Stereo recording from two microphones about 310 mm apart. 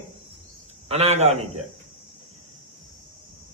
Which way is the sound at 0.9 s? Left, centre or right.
Right.